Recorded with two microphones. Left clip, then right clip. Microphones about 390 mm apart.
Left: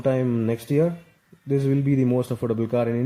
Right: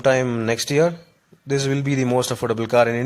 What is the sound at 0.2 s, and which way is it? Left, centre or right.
Speech, right.